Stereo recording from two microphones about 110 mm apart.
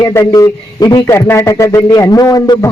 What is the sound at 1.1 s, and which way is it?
A man's voice, 25° left (ahead or behind).